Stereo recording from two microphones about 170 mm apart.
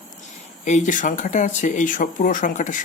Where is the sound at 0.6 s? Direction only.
45° left (ahead or behind).